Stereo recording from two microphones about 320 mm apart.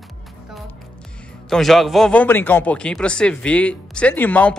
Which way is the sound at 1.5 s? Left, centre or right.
Centre.